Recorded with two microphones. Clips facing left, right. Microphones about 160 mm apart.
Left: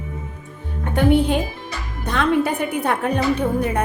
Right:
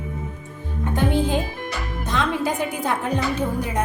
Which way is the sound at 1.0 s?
65° left (ahead or behind).